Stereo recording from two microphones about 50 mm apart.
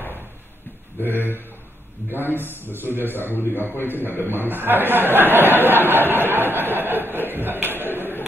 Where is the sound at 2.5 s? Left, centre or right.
Left.